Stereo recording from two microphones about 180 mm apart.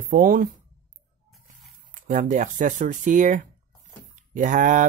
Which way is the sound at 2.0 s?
45° right (ahead or behind).